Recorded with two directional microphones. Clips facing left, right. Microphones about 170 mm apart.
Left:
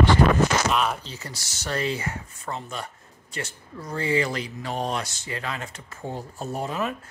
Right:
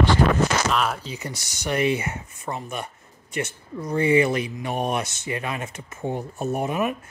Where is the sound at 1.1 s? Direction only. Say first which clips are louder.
Right 5 dB; 20° right (ahead or behind).